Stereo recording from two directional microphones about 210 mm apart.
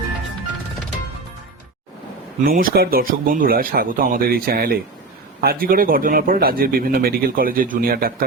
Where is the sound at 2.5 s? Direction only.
45° right (ahead or behind).